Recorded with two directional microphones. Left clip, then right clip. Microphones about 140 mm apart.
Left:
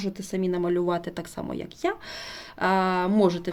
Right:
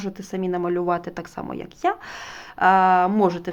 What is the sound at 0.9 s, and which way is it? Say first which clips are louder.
Speech: right 4 dB; 55° left (ahead or behind).